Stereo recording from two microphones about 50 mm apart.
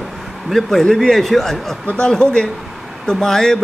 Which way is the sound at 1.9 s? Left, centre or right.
Centre.